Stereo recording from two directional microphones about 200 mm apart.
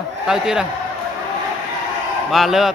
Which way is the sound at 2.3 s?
Centre (ahead or behind).